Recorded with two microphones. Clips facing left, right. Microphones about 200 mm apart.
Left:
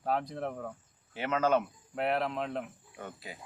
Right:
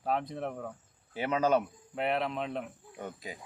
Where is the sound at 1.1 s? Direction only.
15° right (ahead or behind).